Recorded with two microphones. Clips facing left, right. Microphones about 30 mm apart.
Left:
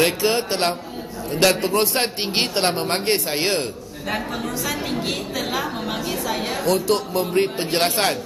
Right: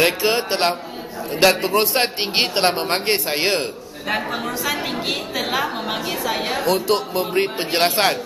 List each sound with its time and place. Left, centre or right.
0.0 s a woman's voice: centre
4.6 s a woman's voice: centre